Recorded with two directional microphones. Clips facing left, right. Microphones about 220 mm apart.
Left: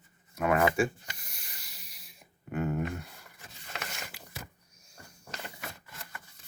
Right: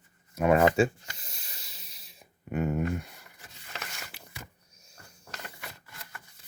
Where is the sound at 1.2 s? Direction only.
25° right (ahead or behind).